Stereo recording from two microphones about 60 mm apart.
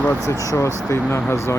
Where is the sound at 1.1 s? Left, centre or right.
Left.